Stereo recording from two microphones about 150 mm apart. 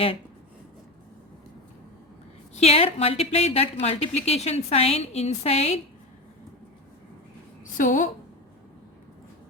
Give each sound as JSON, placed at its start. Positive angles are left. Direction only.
{"t": 2.6, "sound": "speech", "side_deg": 45}
{"t": 7.8, "sound": "a woman's voice", "side_deg": 60}